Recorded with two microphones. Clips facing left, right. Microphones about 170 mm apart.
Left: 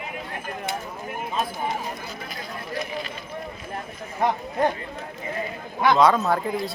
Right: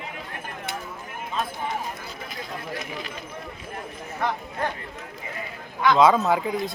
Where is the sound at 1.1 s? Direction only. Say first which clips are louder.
Left 2 dB; 20° left (ahead or behind).